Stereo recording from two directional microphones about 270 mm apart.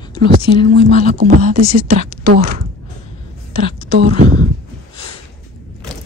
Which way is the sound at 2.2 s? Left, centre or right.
Right.